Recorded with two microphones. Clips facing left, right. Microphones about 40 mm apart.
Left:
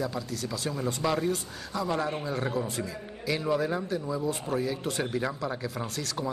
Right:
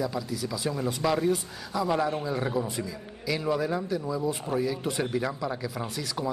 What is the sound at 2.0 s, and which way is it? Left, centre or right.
Speech, centre.